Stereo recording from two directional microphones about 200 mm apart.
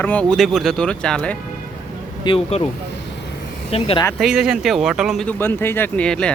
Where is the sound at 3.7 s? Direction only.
30° left (ahead or behind).